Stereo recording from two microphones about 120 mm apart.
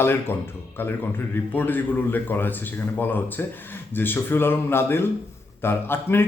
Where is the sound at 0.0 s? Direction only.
20° left (ahead or behind).